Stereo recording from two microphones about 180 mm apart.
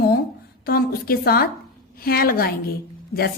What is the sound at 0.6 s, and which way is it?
A woman's voice, 55° left (ahead or behind).